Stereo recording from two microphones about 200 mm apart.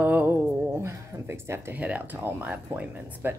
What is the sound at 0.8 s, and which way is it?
A woman's voice, 15° right (ahead or behind).